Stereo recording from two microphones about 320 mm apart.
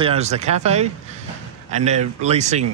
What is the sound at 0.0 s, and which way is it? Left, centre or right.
Speech, centre.